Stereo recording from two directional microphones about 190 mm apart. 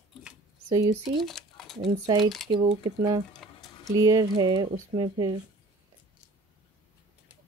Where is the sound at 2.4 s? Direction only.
25° right (ahead or behind).